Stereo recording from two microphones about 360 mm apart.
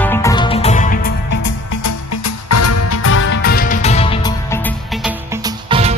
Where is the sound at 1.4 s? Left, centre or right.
Left; by 5.9 s centre.